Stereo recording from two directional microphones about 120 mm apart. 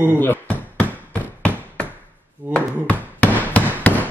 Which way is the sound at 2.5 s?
10° left (ahead or behind).